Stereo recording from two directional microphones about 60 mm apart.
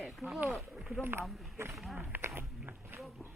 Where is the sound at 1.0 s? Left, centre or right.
Right.